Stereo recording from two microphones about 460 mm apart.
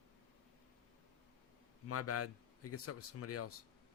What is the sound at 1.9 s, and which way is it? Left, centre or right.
Speech, left.